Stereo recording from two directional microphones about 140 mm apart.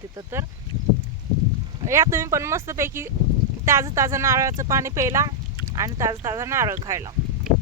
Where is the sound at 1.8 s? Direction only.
20° right (ahead or behind).